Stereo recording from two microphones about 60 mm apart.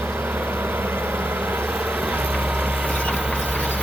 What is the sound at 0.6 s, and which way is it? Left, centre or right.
Vehicle, right.